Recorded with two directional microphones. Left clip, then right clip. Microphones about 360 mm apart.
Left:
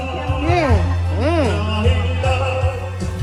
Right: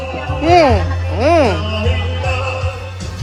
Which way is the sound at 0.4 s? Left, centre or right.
Centre.